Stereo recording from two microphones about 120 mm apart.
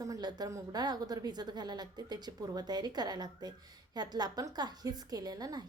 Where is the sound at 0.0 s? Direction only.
30° right (ahead or behind).